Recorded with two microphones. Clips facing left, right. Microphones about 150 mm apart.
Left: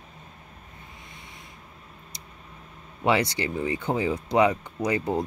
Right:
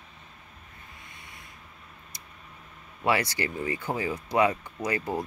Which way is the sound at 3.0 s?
20° left (ahead or behind).